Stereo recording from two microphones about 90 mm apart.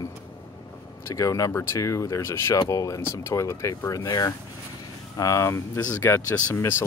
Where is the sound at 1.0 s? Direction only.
35° left (ahead or behind).